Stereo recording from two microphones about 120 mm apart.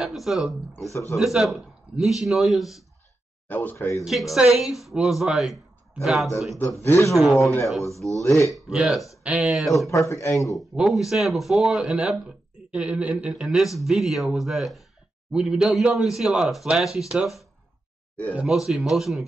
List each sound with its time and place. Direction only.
0.0 s speech: centre (ahead or behind)
3.4 s speech: 15° left (ahead or behind)
4.0 s speech: centre (ahead or behind)
6.6 s speech: 20° left (ahead or behind)
7.1 s speech: centre (ahead or behind)
8.2 s speech: 25° left (ahead or behind)
8.5 s speech: 5° right (ahead or behind)
9.8 s speech: 25° left (ahead or behind)
10.5 s speech: centre (ahead or behind)